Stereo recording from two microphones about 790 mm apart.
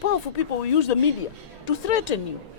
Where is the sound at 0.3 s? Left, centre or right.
Left.